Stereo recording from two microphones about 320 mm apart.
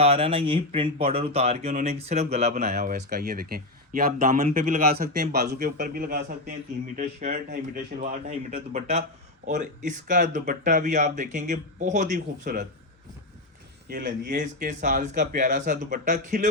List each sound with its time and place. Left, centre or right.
0.0 s speech: centre
13.8 s speech: right